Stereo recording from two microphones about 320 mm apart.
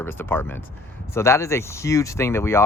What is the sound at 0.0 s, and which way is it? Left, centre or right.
Speech, centre.